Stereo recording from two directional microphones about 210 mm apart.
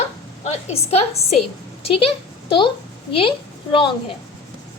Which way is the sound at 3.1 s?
25° left (ahead or behind).